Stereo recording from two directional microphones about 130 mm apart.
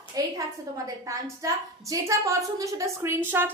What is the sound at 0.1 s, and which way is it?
A woman's voice, 30° right (ahead or behind).